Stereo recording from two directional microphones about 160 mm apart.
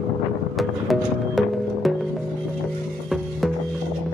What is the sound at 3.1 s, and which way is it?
Music, centre (ahead or behind).